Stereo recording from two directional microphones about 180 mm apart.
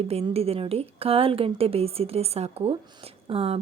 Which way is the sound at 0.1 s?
35° right (ahead or behind).